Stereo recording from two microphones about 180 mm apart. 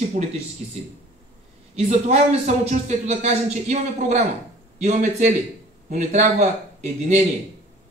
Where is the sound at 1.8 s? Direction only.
35° right (ahead or behind).